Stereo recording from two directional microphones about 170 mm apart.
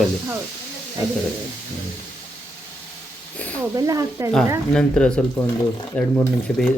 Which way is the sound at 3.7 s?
20° right (ahead or behind).